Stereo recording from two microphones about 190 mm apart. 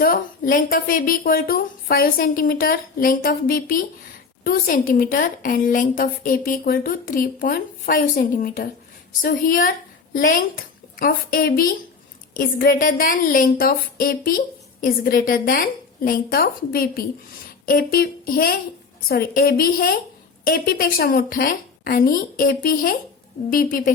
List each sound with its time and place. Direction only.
0.0 s a woman's voice: 50° left (ahead or behind)